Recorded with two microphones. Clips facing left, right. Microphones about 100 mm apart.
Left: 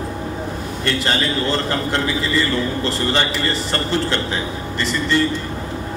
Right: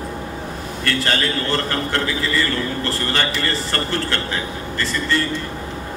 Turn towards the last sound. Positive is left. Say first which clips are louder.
# left 2 dB
turn(degrees=20)  # may be behind; listen again after turning